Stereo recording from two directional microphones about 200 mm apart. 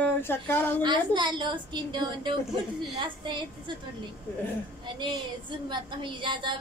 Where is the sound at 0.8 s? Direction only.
20° right (ahead or behind).